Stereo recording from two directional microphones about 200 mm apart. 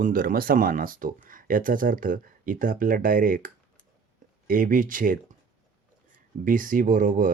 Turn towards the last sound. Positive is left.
turn(degrees=-40)  # may be behind; listen again after turning